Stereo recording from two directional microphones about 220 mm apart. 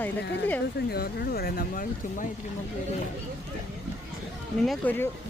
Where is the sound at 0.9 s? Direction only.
45° left (ahead or behind).